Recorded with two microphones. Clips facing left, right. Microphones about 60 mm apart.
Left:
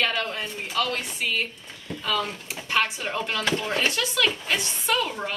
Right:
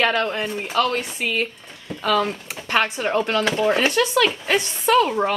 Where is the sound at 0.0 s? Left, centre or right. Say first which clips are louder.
Right 6 dB; right.